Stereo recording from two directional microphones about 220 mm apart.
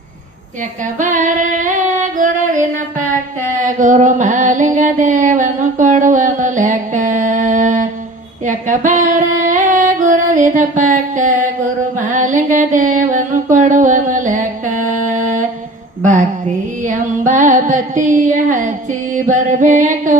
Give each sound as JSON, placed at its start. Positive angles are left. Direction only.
{"t": 0.9, "sound": "music", "side_deg": -35}
{"t": 3.6, "sound": "a sound", "side_deg": -35}
{"t": 8.4, "sound": "music", "side_deg": -35}
{"t": 11.9, "sound": "mantra", "side_deg": -35}
{"t": 16.8, "sound": "a sound", "side_deg": -35}
{"t": 19.1, "sound": "music", "side_deg": -35}